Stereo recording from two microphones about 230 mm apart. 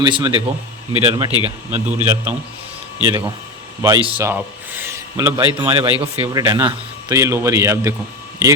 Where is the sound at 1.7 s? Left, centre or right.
Centre.